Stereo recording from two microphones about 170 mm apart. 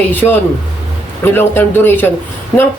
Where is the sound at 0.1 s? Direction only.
10° left (ahead or behind).